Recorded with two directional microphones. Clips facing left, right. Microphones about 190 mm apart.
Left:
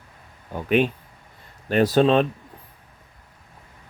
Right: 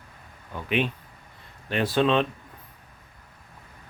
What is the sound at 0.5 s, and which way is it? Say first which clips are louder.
Speech: left 6 dB; 45° left (ahead or behind).